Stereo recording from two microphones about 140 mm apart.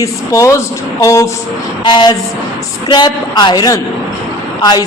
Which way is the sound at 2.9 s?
30° left (ahead or behind).